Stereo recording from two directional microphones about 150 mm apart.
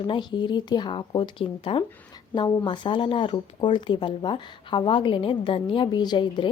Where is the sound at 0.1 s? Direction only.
30° left (ahead or behind).